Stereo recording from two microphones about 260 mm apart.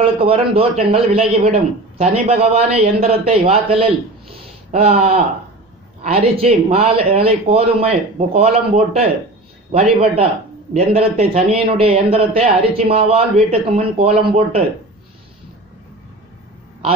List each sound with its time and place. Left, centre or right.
0.0 s a man's voice: right